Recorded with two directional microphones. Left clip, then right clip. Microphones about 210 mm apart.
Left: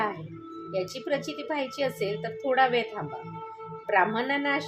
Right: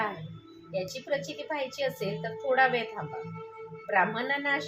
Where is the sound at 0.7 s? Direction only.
40° left (ahead or behind).